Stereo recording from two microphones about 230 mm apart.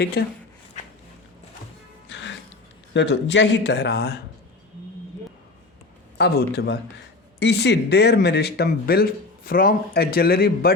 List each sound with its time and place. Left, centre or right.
0.0 s speech: left
2.0 s music: left
2.9 s speech: left
6.1 s speech: left